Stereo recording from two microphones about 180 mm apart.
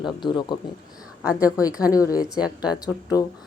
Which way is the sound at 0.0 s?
25° left (ahead or behind).